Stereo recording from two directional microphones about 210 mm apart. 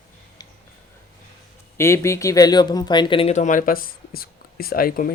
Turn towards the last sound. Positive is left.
turn(degrees=45)  # may be behind; listen again after turning